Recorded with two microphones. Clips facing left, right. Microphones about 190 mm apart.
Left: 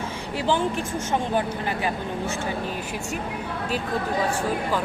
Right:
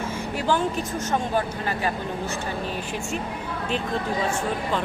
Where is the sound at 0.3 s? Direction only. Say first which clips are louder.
Even; 15° left (ahead or behind).